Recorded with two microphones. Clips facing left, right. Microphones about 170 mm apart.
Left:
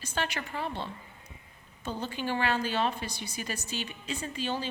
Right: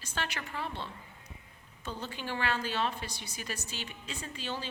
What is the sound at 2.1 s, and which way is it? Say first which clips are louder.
A woman's voice: left 4 dB; 5° left (ahead or behind).